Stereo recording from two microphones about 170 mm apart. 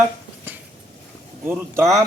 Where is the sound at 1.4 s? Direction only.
15° right (ahead or behind).